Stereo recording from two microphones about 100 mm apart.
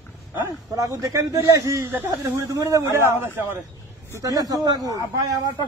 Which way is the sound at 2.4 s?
30° right (ahead or behind).